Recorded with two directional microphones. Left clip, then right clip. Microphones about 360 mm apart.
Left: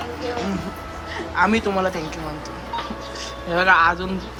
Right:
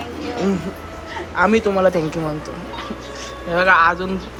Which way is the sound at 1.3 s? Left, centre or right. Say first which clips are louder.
Right 3 dB; centre.